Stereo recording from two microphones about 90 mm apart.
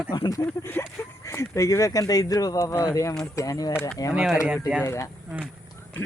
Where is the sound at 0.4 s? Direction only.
25° left (ahead or behind).